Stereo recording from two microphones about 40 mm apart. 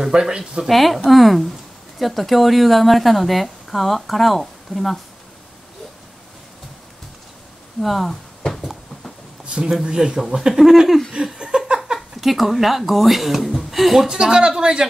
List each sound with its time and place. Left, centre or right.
0.0 s speech: centre
0.7 s speech: centre
7.8 s speech: centre
9.5 s speech: centre
11.3 s a sound: centre
12.2 s speech: centre
14.0 s speech: centre